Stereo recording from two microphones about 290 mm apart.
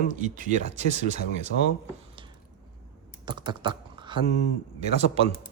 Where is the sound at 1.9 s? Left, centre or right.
Centre.